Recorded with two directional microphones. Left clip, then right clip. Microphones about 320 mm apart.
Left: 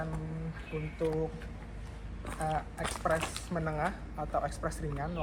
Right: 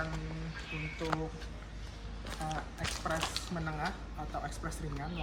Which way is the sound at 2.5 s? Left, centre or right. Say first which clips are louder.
Left 5 dB; centre.